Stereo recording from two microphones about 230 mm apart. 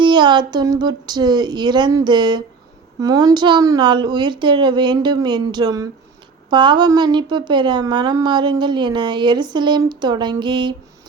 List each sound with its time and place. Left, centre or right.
0.0 s a woman's voice: centre